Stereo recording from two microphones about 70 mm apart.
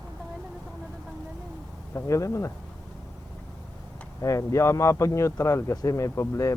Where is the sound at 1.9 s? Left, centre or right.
Left.